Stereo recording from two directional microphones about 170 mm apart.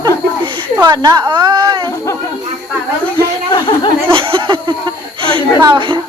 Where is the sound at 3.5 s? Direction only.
30° left (ahead or behind).